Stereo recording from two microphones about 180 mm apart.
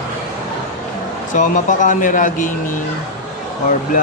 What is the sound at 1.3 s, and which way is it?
Speech, 45° left (ahead or behind).